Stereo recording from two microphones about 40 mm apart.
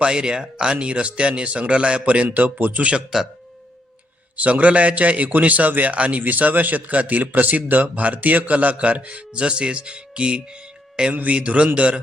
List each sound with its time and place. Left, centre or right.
0.0 s speech: right
2.2 s speech: right
3.1 s speech: centre
4.4 s speech: right
6.1 s speech: right
11.1 s speech: right
11.3 s speech: right